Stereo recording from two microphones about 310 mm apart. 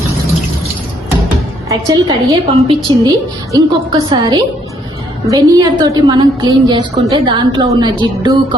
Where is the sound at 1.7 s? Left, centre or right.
Centre.